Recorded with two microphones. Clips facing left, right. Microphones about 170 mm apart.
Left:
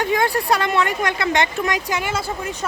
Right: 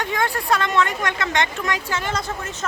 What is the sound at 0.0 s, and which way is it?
Speech, 10° left (ahead or behind).